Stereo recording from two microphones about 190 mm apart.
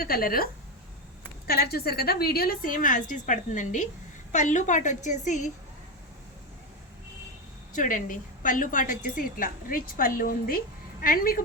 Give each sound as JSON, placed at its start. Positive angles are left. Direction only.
{"t": 0.0, "sound": "a woman's voice", "side_deg": 50}
{"t": 1.5, "sound": "a woman's voice", "side_deg": 55}
{"t": 7.8, "sound": "a woman's voice", "side_deg": 45}